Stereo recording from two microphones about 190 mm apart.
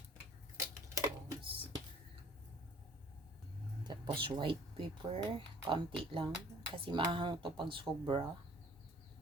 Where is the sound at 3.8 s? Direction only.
25° right (ahead or behind).